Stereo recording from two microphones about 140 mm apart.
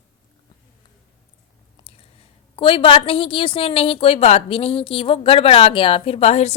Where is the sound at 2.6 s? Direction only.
40° left (ahead or behind).